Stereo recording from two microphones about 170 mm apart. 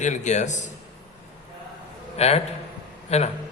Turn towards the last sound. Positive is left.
turn(degrees=40)  # may be behind; listen again after turning